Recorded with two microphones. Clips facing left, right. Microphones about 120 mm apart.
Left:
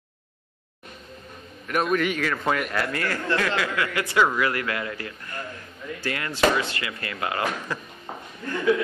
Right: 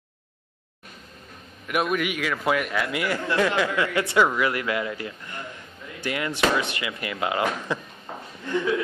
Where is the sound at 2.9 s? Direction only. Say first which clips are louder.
Even; 15° right (ahead or behind).